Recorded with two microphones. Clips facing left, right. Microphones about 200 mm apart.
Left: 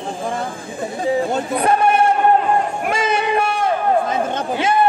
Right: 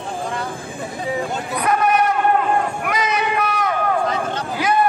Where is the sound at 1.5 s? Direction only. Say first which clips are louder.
Left 2 dB; 30° left (ahead or behind).